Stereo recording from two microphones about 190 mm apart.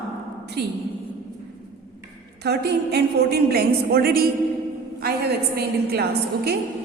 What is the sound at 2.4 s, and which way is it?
A woman's voice, 60° right (ahead or behind).